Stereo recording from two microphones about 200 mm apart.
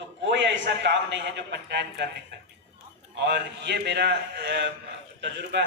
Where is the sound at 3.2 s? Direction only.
55° right (ahead or behind).